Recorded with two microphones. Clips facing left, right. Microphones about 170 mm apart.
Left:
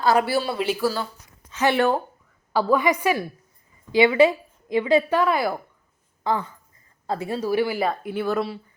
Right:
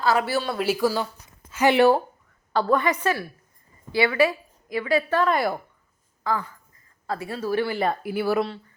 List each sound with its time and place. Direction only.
0.3 s a woman's voice: 10° left (ahead or behind)
0.6 s speech: 10° right (ahead or behind)
2.5 s a woman's voice: 10° left (ahead or behind)
6.2 s a woman's voice: 20° left (ahead or behind); by 8.4 s 5° right (ahead or behind)